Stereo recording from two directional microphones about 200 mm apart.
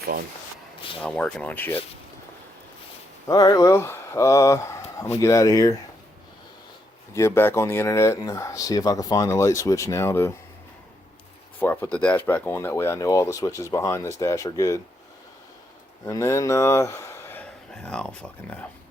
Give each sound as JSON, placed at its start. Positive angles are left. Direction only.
{"t": 1.0, "sound": "speech", "side_deg": 5}
{"t": 3.2, "sound": "speech", "side_deg": 20}
{"t": 7.1, "sound": "speech", "side_deg": 15}
{"t": 11.6, "sound": "speech", "side_deg": 10}
{"t": 16.0, "sound": "speech", "side_deg": 15}